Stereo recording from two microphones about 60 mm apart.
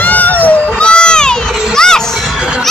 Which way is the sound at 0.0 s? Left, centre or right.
Left.